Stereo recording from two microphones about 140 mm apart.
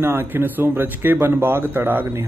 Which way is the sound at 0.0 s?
15° right (ahead or behind).